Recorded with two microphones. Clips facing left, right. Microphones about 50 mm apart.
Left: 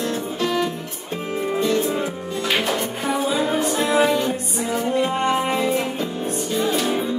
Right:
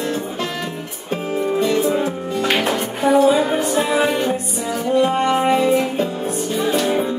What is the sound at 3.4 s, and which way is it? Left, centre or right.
Music, centre.